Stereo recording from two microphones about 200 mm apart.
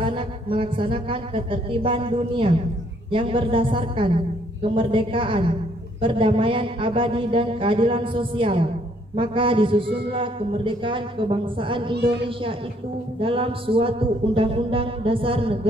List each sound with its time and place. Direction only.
0.0 s a man's voice: 25° right (ahead or behind)
13.2 s a man's voice: 25° right (ahead or behind)